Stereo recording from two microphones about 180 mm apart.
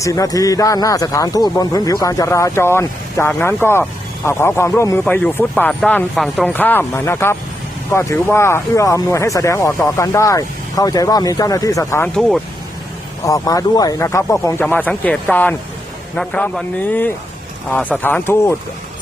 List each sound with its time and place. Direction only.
0.0 s a man's voice: 20° left (ahead or behind); by 6.5 s centre (ahead or behind)
6.5 s speech: 10° left (ahead or behind)
13.2 s speech: 20° left (ahead or behind)